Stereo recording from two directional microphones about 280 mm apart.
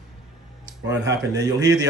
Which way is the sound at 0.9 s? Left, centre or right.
Centre.